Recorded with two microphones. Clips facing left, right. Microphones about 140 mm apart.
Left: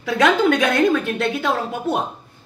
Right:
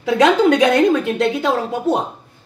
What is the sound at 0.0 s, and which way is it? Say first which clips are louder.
A man's voice: right 3 dB; 20° right (ahead or behind).